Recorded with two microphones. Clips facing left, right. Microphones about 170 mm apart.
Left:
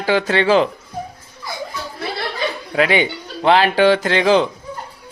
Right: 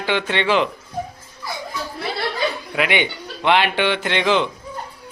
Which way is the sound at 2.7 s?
35° left (ahead or behind).